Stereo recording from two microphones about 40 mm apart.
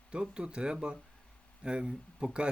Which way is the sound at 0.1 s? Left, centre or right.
Right.